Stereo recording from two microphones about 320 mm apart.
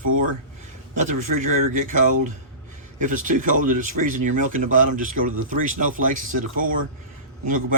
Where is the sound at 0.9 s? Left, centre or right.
Right.